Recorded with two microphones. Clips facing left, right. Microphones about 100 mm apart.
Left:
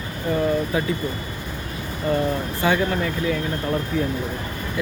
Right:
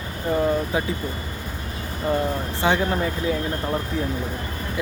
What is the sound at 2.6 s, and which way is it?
Speech, 25° right (ahead or behind).